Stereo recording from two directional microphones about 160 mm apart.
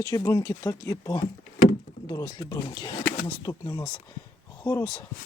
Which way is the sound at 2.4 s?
25° left (ahead or behind).